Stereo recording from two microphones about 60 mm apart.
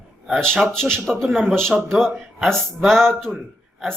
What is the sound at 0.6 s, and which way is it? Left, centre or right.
Speech, centre.